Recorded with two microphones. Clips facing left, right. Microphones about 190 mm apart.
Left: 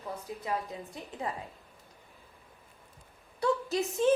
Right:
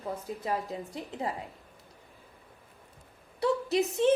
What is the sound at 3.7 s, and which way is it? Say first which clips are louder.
Speech: right 3 dB; 25° right (ahead or behind).